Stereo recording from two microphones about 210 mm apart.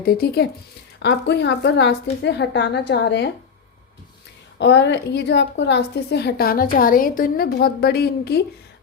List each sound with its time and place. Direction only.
0.0 s a woman's voice: 50° left (ahead or behind)
4.5 s a woman's voice: 55° left (ahead or behind)